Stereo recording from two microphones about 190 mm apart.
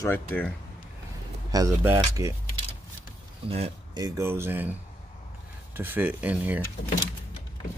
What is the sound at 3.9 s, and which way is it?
Speech, 15° right (ahead or behind).